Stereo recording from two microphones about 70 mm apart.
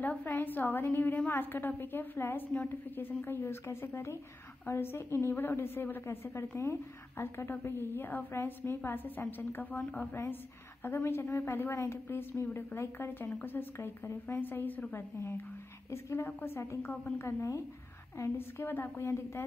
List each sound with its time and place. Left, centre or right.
0.0 s a woman's voice: left
18.6 s a woman's voice: left